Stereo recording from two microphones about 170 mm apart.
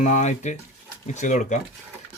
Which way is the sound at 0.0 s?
45° left (ahead or behind).